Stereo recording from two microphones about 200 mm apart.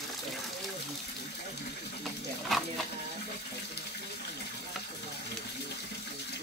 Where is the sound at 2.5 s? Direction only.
Centre (ahead or behind).